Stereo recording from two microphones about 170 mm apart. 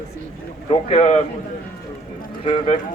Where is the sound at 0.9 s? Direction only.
40° left (ahead or behind).